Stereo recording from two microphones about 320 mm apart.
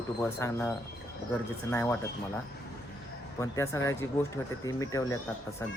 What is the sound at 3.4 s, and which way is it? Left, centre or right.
Speech, centre.